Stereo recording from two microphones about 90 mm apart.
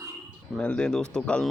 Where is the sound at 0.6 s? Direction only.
10° left (ahead or behind).